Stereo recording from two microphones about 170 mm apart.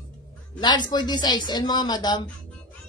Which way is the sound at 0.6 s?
25° left (ahead or behind).